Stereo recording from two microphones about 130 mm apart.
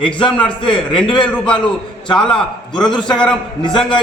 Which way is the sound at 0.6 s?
40° left (ahead or behind).